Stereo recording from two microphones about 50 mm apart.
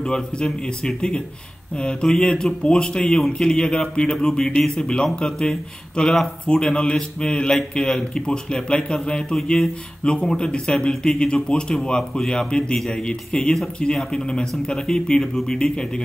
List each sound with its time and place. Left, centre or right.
0.0 s speech: centre